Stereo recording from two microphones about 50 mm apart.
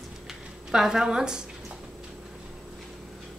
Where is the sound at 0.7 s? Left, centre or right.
Centre.